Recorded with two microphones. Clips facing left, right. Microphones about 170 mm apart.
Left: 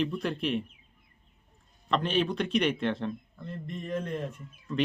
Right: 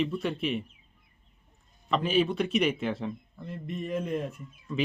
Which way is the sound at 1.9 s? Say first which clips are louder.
Right 2 dB; 5° right (ahead or behind).